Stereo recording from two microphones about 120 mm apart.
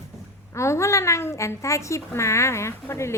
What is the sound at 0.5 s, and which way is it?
A woman's voice, 25° left (ahead or behind).